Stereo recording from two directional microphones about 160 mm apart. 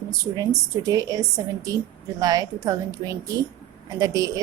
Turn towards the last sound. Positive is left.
turn(degrees=-20)  # may be behind; listen again after turning